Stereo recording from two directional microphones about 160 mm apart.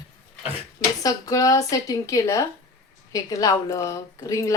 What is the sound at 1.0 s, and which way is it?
A woman's voice, 20° left (ahead or behind).